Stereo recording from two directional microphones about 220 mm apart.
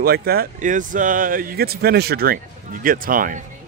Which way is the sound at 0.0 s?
45° right (ahead or behind).